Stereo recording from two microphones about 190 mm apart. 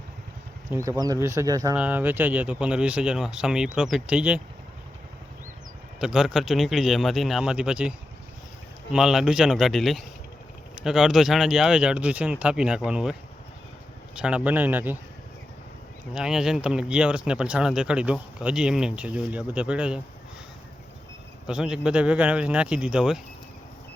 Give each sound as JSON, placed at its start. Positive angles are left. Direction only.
{"t": 0.7, "sound": "speech", "side_deg": -15}
{"t": 6.0, "sound": "speech", "side_deg": -5}
{"t": 14.2, "sound": "speech", "side_deg": -5}
{"t": 16.1, "sound": "speech", "side_deg": -5}
{"t": 21.4, "sound": "speech", "side_deg": -5}